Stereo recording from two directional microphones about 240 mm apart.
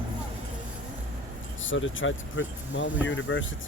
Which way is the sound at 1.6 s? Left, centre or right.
Left.